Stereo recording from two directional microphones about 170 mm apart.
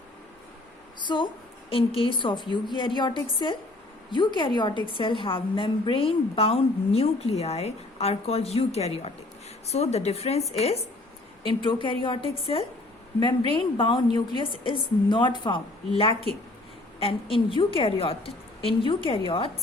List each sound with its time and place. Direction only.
0.9 s a sound: 25° left (ahead or behind)
1.7 s a woman's voice: 30° left (ahead or behind)
11.4 s a woman's voice: 30° left (ahead or behind)
13.5 s a woman's voice: 30° left (ahead or behind)